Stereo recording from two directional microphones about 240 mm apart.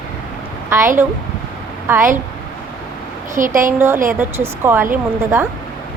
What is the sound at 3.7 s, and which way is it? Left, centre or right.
Speech, centre.